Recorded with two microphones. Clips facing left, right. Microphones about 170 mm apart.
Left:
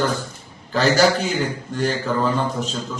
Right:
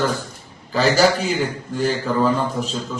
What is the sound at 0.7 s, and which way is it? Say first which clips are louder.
Speech: even; centre (ahead or behind).